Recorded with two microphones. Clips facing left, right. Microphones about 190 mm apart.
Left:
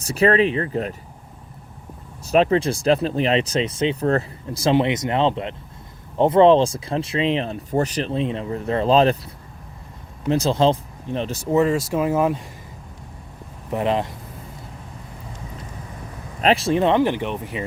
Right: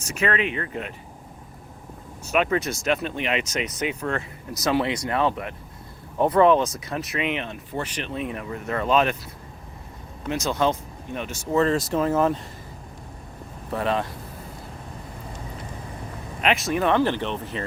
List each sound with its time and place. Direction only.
0.0 s speech: 35° left (ahead or behind)
2.2 s speech: 35° left (ahead or behind)
11.5 s speech: 10° left (ahead or behind)
13.7 s speech: 20° left (ahead or behind)
16.4 s speech: 35° left (ahead or behind); by 17.7 s 10° left (ahead or behind)